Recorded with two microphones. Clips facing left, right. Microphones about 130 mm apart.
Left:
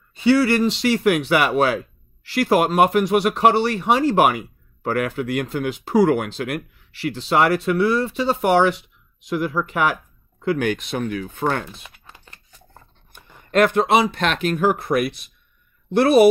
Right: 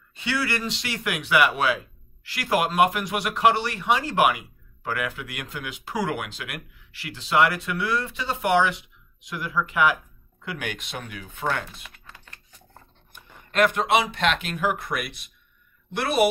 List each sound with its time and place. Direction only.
0.2 s speech: 35° left (ahead or behind)
11.7 s typing: 25° left (ahead or behind)
13.1 s speech: 30° left (ahead or behind)